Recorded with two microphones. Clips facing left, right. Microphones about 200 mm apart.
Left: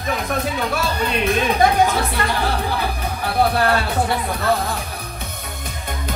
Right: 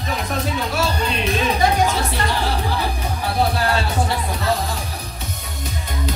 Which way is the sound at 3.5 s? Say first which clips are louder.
Left 3 dB; 55° left (ahead or behind).